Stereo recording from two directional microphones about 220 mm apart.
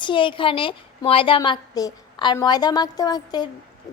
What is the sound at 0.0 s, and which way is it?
A woman's voice, 20° left (ahead or behind).